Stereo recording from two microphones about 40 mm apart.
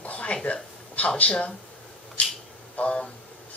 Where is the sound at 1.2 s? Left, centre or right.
Left.